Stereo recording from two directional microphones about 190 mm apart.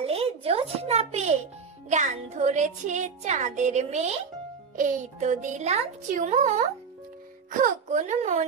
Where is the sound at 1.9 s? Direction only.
35° right (ahead or behind).